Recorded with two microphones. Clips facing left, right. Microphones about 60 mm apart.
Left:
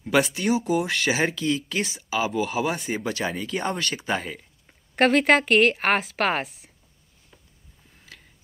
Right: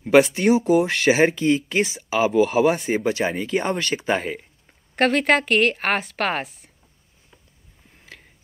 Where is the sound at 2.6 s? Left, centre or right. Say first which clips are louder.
Right 7 dB; right.